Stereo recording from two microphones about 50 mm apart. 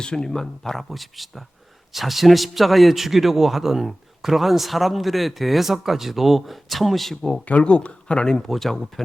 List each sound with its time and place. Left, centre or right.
0.0 s a man's voice: centre
7.4 s speech: left
8.4 s a man's voice: centre